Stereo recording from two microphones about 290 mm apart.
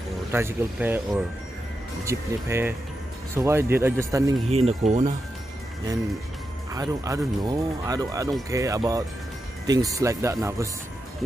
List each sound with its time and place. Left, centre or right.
0.3 s speech: centre
4.5 s speech: right
6.7 s speech: centre